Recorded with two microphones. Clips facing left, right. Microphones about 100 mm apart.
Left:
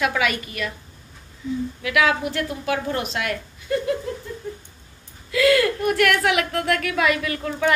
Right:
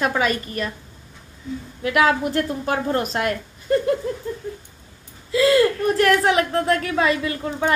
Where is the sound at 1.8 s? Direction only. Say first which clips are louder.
Right 3 dB; 40° right (ahead or behind).